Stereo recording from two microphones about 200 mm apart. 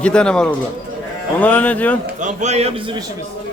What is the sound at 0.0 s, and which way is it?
A man's voice, 5° left (ahead or behind).